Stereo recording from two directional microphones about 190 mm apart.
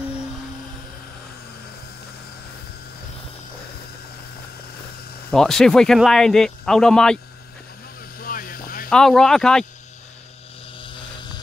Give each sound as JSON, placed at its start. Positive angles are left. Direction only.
{"t": 5.3, "sound": "speech", "side_deg": 5}
{"t": 8.2, "sound": "vehicle", "side_deg": 50}
{"t": 8.9, "sound": "speech", "side_deg": 5}
{"t": 10.8, "sound": "vehicle", "side_deg": 25}